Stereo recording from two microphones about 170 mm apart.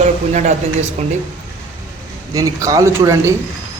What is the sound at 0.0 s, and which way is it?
Speech, 45° right (ahead or behind).